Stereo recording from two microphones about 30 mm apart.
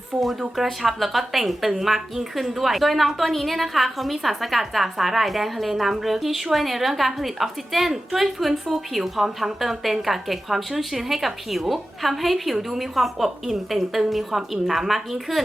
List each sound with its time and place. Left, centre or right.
0.2 s a woman's voice: centre